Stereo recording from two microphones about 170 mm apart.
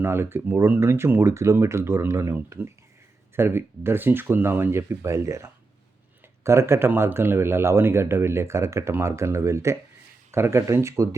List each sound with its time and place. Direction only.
0.0 s speech: 15° right (ahead or behind)